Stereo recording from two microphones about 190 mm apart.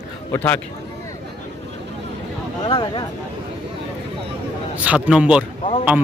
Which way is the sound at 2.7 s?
25° left (ahead or behind).